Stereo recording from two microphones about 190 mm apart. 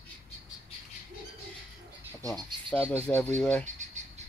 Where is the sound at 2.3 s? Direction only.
10° left (ahead or behind).